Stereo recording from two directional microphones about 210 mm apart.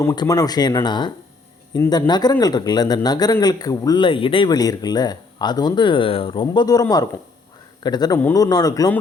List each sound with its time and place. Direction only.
0.0 s speech: 15° left (ahead or behind)